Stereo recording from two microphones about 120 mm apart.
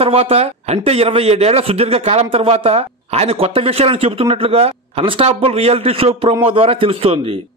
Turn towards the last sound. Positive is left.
turn(degrees=-55)  # may be behind; listen again after turning